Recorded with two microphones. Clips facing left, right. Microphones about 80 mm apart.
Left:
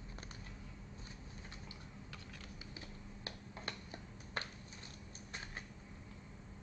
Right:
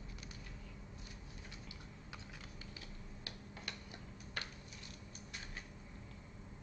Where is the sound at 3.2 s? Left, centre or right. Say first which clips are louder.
Left 4 dB; left.